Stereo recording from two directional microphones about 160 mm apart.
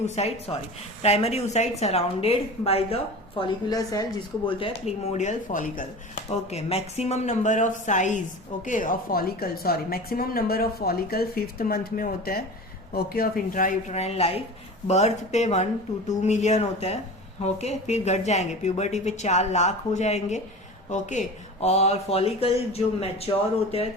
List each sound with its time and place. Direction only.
0.0 s a woman's voice: 40° left (ahead or behind); by 4.0 s 25° left (ahead or behind)
4.4 s speech: 35° left (ahead or behind); by 5.8 s 60° left (ahead or behind)
6.5 s a woman's voice: 40° left (ahead or behind)